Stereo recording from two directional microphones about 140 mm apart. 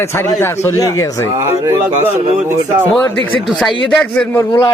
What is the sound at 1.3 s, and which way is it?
Speech, 20° right (ahead or behind).